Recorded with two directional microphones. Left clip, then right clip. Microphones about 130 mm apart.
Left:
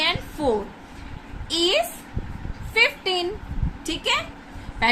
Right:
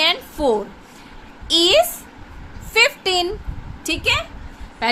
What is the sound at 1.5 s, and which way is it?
A woman's voice, 60° right (ahead or behind).